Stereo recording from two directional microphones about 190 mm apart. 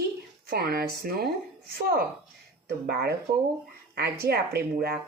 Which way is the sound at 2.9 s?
60° right (ahead or behind).